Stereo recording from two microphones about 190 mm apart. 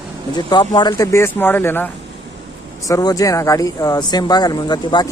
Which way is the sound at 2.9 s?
20° left (ahead or behind).